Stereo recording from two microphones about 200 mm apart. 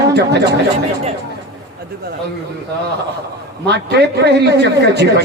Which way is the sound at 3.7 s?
55° right (ahead or behind).